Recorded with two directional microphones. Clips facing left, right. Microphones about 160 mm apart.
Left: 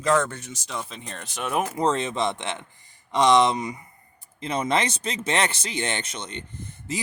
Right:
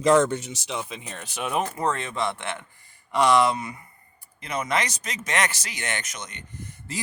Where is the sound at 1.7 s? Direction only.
20° left (ahead or behind).